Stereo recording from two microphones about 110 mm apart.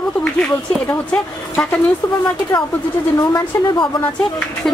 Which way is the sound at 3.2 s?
40° left (ahead or behind).